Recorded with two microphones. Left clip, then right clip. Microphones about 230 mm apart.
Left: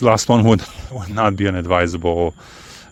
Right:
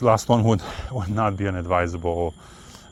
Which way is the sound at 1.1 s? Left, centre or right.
Left.